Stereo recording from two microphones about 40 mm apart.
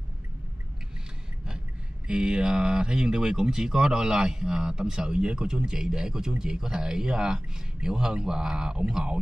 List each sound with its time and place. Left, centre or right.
2.0 s speech: right